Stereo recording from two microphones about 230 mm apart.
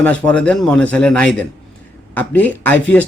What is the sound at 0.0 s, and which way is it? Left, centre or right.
Speech, centre.